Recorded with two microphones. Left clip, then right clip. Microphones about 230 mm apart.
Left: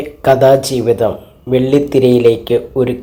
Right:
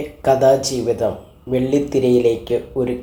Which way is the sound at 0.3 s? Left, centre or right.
Left.